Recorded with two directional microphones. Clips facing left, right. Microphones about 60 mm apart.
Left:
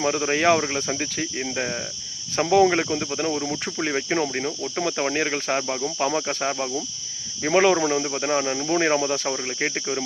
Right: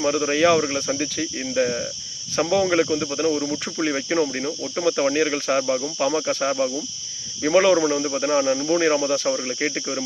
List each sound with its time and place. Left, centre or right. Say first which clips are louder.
0.3 s speech: right 2 dB; left
0.6 s speech: right 2 dB; left
1.0 s speech: right 1 dB; left
1.5 s speech: right 6 dB; centre